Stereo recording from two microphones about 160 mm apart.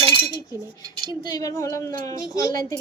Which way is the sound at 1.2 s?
25° left (ahead or behind).